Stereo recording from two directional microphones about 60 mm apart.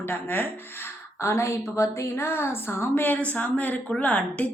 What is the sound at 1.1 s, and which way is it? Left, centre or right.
A woman's voice, left.